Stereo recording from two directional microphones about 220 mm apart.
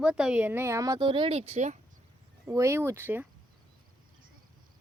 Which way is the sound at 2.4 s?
10° right (ahead or behind).